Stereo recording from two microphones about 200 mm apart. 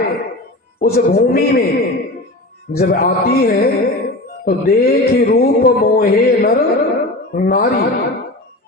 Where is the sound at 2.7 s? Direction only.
50° left (ahead or behind).